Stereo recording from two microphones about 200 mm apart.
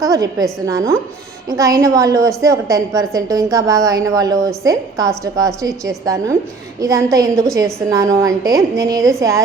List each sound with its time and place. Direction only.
0.0 s a woman's voice: 15° right (ahead or behind)